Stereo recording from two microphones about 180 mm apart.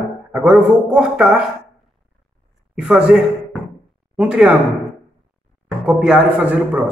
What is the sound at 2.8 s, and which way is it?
A man's voice, 5° right (ahead or behind).